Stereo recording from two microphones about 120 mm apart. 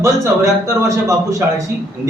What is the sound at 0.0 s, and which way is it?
A man's voice, 25° right (ahead or behind).